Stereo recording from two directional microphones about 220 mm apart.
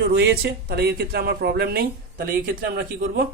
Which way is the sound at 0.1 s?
50° right (ahead or behind).